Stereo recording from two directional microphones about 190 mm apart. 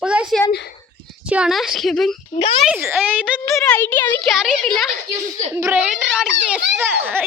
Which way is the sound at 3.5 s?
10° left (ahead or behind).